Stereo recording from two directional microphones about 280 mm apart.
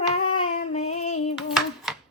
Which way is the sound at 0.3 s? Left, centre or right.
Left.